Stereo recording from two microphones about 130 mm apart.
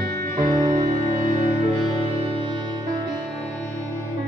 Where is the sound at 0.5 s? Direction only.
25° right (ahead or behind).